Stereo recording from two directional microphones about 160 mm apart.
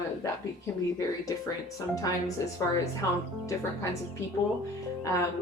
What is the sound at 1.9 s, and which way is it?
Speech, 20° left (ahead or behind).